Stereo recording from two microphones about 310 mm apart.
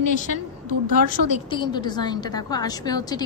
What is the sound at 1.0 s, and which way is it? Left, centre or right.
A woman's voice, centre.